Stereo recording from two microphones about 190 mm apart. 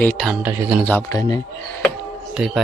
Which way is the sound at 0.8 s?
10° left (ahead or behind).